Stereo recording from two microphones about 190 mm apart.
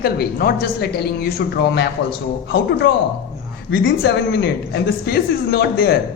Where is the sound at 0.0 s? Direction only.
55° left (ahead or behind).